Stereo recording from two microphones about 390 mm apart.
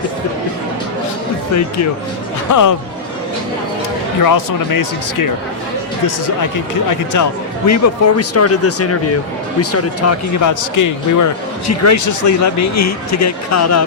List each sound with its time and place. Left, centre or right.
2.5 s speech: left
4.2 s speech: left
7.1 s speech: left